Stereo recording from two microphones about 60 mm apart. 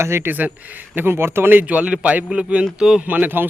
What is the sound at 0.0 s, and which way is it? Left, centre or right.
Speech, right.